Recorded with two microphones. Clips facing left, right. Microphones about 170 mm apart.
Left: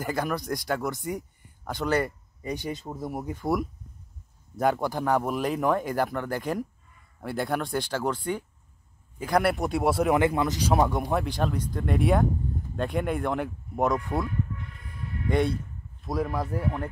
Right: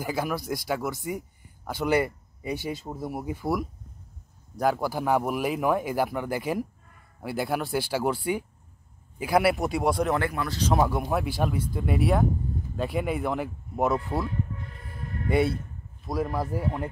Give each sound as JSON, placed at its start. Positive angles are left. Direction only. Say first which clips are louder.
{"t": 0.0, "sound": "speech", "louder": "even", "side_deg": -5}
{"t": 10.1, "sound": "speech", "louder": "left 4 dB", "side_deg": 20}
{"t": 10.7, "sound": "speech", "louder": "right 1 dB", "side_deg": 0}
{"t": 14.2, "sound": "a sound", "louder": "even", "side_deg": -35}
{"t": 15.2, "sound": "speech", "louder": "right 1 dB", "side_deg": -5}